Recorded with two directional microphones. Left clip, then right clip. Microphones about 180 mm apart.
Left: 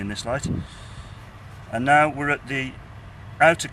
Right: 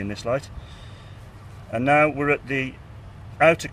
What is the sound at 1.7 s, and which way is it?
Speech, 35° right (ahead or behind).